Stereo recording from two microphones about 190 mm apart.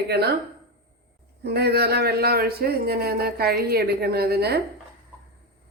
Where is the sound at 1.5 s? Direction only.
60° right (ahead or behind).